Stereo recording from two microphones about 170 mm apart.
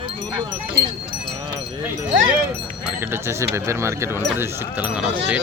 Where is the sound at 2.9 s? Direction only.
15° right (ahead or behind).